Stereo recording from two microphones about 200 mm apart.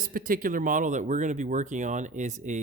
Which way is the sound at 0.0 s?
45° right (ahead or behind).